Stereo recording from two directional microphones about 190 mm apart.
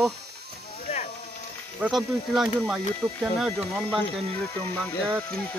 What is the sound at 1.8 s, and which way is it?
Speech, centre (ahead or behind).